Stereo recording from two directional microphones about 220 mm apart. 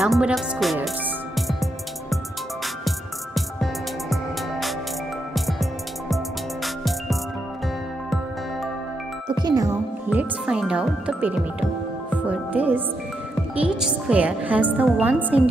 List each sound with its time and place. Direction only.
0.0 s speech: centre (ahead or behind)
1.3 s music: centre (ahead or behind)
4.1 s music: centre (ahead or behind)
9.3 s music: 20° right (ahead or behind)
10.0 s music: 5° right (ahead or behind)
12.3 s a woman's voice: 5° right (ahead or behind)